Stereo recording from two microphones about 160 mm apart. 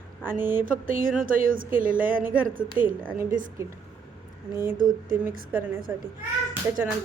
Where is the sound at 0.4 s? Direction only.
60° right (ahead or behind).